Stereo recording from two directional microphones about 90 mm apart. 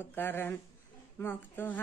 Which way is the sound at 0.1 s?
25° left (ahead or behind).